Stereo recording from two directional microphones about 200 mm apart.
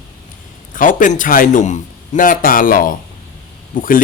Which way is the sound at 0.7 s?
40° left (ahead or behind).